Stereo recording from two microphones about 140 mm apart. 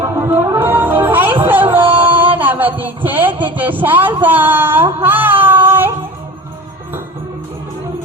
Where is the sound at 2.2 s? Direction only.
10° right (ahead or behind).